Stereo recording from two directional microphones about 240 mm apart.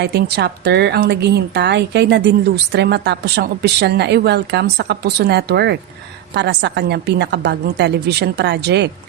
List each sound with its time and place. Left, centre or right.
0.0 s a woman's voice: right